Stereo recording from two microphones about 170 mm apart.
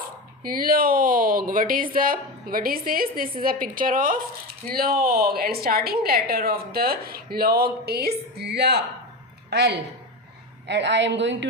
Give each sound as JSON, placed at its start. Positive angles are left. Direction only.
{"t": 0.4, "sound": "a woman's voice", "side_deg": -60}
{"t": 10.7, "sound": "a woman's voice", "side_deg": -90}